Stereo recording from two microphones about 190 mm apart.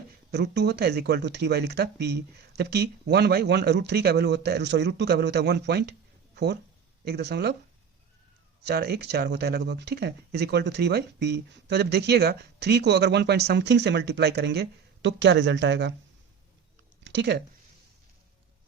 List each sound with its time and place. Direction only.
0.3 s speech: 60° right (ahead or behind)
8.6 s speech: 55° right (ahead or behind)
17.0 s a sound: 65° right (ahead or behind)